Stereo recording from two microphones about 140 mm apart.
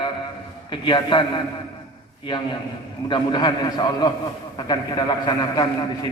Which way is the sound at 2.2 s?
35° left (ahead or behind).